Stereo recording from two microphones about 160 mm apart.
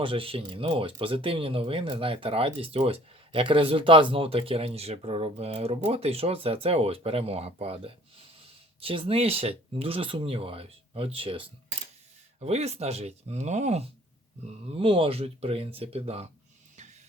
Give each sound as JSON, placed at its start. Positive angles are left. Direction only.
{"t": 0.0, "sound": "speech", "side_deg": -35}
{"t": 14.8, "sound": "speech", "side_deg": -35}
{"t": 16.7, "sound": "a sound", "side_deg": -50}